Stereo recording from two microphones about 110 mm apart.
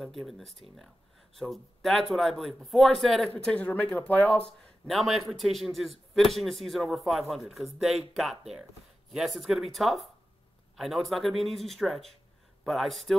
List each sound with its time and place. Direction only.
0.0 s a man's voice: centre (ahead or behind)
4.8 s a man's voice: centre (ahead or behind)